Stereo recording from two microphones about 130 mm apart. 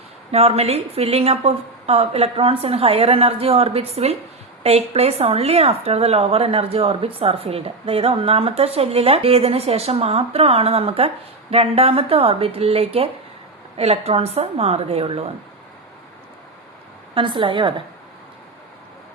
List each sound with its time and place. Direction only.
0.3 s a woman's voice: 50° right (ahead or behind)
17.2 s a woman's voice: 40° right (ahead or behind)